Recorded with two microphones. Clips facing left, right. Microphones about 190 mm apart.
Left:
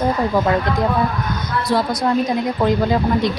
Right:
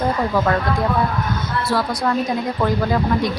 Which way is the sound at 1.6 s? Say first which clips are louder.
Left 3 dB; 20° left (ahead or behind).